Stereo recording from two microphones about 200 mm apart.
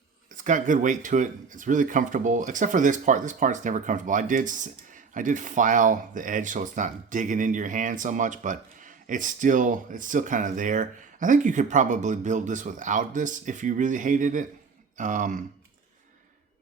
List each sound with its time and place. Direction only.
0.3 s speech: 40° right (ahead or behind)